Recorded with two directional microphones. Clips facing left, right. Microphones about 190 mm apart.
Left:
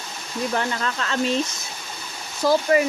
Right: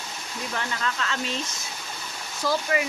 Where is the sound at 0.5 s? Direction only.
40° left (ahead or behind).